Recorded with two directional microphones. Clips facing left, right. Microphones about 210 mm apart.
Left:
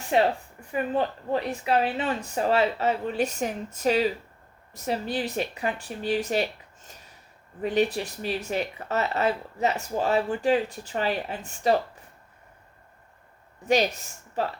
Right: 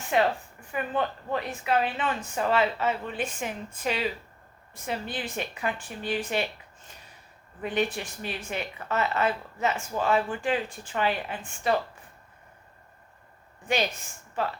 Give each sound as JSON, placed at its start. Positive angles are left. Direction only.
{"t": 0.1, "sound": "speech", "side_deg": 35}
{"t": 13.7, "sound": "speech", "side_deg": 40}